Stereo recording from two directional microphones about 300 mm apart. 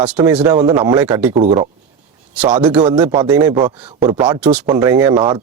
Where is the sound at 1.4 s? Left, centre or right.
Centre.